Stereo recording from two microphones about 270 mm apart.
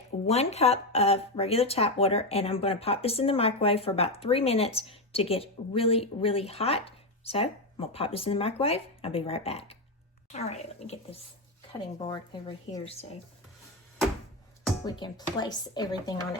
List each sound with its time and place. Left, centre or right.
0.3 s speech: left
11.9 s speech: centre
14.8 s speech: centre